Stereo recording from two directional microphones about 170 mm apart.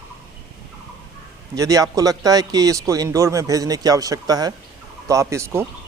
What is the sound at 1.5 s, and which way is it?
A man's voice, 20° right (ahead or behind).